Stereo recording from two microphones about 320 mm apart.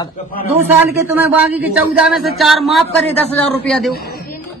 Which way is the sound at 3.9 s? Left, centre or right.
Left.